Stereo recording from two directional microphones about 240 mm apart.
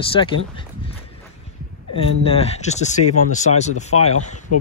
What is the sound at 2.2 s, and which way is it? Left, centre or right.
Speech, left.